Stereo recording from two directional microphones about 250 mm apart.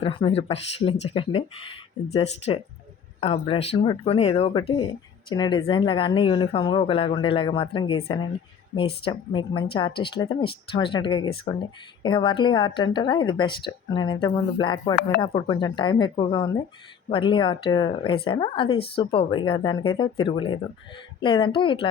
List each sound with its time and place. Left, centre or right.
0.0 s speech: left